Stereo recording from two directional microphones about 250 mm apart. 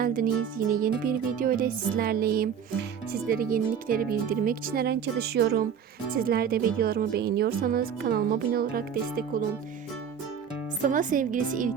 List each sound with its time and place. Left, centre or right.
0.0 s speech: right
10.8 s speech: right